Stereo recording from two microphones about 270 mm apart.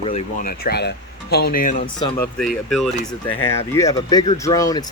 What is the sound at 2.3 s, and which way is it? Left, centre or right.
Speech, centre.